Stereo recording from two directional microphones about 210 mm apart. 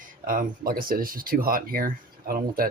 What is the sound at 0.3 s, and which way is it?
Speech, 40° right (ahead or behind).